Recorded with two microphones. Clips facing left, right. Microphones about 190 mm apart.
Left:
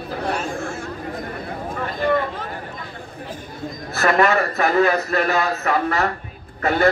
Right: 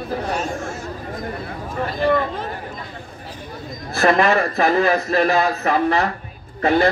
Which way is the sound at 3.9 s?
30° right (ahead or behind).